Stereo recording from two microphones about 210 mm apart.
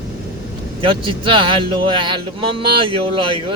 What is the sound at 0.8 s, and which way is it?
Speech, 25° right (ahead or behind).